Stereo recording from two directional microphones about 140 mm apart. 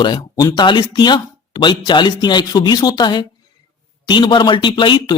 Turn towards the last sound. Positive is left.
turn(degrees=35)  # may be behind; listen again after turning